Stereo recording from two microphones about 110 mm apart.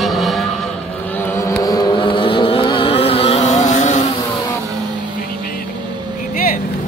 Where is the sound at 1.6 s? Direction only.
35° left (ahead or behind).